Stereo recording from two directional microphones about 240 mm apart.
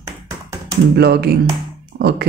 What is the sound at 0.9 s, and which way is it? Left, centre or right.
Speech, right.